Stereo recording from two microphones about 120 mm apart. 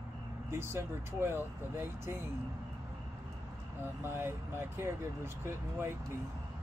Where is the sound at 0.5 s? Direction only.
20° right (ahead or behind).